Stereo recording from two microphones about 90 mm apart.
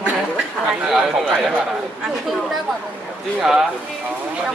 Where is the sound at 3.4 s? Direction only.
5° right (ahead or behind).